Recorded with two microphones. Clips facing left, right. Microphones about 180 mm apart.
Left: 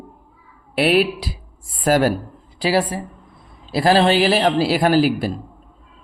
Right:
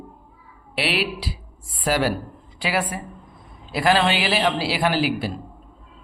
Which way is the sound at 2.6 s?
35° left (ahead or behind).